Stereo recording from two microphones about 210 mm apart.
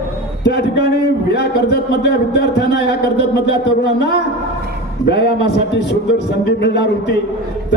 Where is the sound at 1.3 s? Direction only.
55° left (ahead or behind).